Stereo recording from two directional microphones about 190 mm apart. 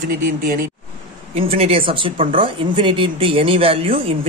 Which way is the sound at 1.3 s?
30° right (ahead or behind).